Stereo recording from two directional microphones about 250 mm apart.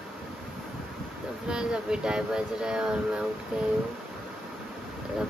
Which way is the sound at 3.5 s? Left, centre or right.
Centre.